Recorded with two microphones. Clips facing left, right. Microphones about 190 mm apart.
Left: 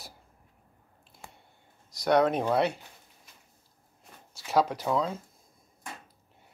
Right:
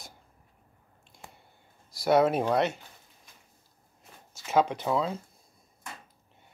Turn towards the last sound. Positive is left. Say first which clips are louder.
# even
turn(degrees=-5)  # may be behind; listen again after turning